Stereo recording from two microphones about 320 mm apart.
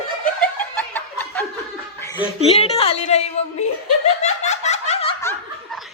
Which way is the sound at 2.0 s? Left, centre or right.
Centre.